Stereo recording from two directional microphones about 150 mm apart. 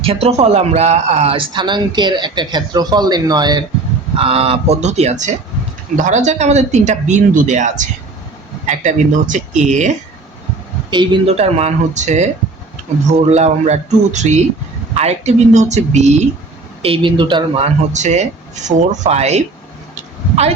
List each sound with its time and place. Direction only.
0.0 s speech: 40° right (ahead or behind)
4.2 s speech: 40° right (ahead or behind)
10.9 s speech: 30° right (ahead or behind)
11.3 s speech: 45° right (ahead or behind)
16.8 s speech: 35° right (ahead or behind)
17.9 s speech: 50° right (ahead or behind)